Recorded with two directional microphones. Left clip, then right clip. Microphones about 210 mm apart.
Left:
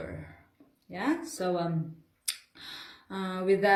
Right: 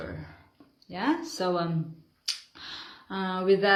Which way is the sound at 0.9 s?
Centre (ahead or behind).